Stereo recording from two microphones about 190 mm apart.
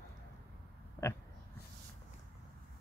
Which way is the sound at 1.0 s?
15° left (ahead or behind).